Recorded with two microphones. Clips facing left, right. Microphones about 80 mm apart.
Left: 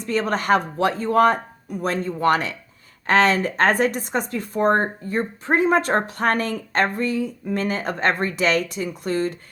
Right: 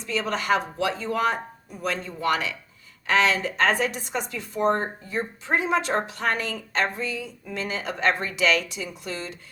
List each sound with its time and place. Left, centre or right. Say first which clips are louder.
0.0 s speech: left 5 dB; left